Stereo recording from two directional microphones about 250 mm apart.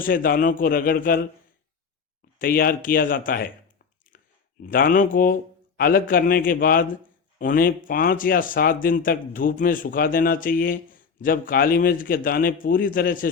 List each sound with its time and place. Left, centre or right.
0.0 s speech: left
2.4 s speech: left
4.1 s a sound: left
4.6 s speech: left